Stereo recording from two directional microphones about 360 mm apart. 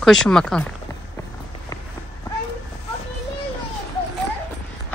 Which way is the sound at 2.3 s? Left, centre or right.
Centre.